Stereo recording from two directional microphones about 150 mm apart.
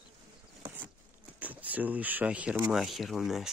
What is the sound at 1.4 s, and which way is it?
Speech, 10° right (ahead or behind).